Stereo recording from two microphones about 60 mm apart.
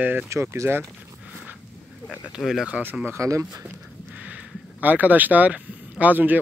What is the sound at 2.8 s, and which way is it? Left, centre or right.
Speech, right.